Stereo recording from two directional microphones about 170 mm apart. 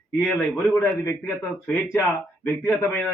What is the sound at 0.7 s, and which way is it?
Speech, 15° left (ahead or behind).